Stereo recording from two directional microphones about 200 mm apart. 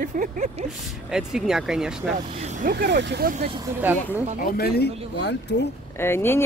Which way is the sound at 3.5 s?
15° right (ahead or behind).